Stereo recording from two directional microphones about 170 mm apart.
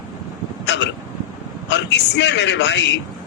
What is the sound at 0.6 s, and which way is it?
Hiccup, 90° left.